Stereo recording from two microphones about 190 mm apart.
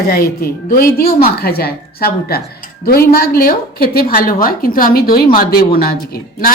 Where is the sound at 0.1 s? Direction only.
55° left (ahead or behind).